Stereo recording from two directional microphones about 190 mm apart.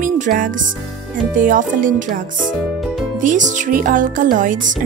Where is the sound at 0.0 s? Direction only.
45° right (ahead or behind).